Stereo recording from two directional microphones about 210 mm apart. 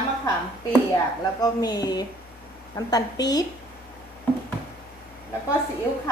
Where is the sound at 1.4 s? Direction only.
20° left (ahead or behind).